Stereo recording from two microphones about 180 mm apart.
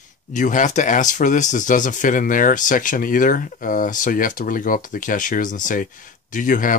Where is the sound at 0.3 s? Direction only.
45° left (ahead or behind).